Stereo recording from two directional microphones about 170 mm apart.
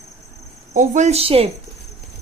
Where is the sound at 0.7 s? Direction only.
45° right (ahead or behind).